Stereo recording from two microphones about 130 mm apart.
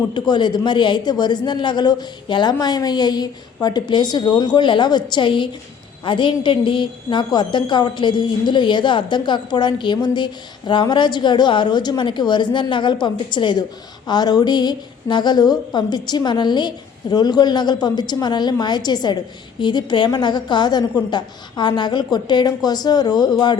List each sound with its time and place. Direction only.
0.1 s a woman's voice: 35° left (ahead or behind)